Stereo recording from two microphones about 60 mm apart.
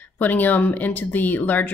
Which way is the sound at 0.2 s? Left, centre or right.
Left.